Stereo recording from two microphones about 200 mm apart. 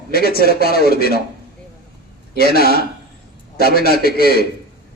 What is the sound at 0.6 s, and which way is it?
Speech, 50° left (ahead or behind).